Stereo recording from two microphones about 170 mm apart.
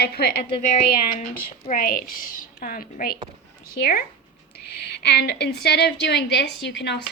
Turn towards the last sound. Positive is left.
turn(degrees=90)